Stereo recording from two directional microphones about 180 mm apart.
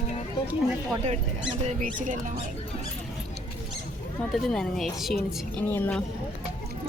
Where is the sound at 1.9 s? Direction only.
45° right (ahead or behind).